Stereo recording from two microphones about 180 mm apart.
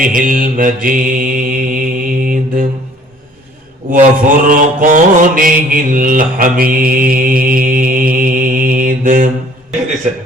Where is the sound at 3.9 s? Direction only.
50° right (ahead or behind).